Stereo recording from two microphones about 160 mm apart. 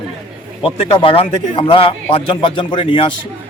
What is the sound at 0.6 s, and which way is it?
Speech, 35° left (ahead or behind).